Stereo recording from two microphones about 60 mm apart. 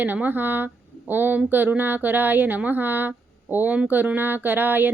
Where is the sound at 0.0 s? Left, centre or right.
Right.